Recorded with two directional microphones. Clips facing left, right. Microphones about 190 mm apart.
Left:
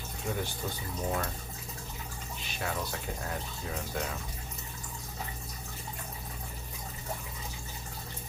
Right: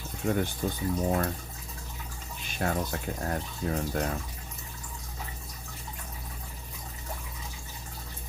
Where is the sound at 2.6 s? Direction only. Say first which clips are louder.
Right 6 dB; 45° right (ahead or behind).